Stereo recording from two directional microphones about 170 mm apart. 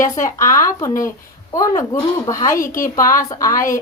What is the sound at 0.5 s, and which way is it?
A woman's voice, 20° left (ahead or behind).